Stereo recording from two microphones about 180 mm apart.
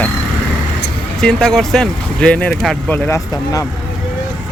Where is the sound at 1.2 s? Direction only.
5° left (ahead or behind).